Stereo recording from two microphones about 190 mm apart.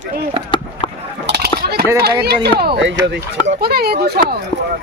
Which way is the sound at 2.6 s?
65° right (ahead or behind).